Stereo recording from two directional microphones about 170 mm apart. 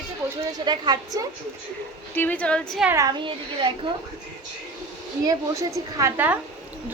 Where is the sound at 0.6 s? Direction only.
25° right (ahead or behind).